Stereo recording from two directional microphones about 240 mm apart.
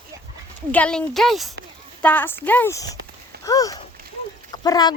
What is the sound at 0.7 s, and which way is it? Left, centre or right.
Speech, centre.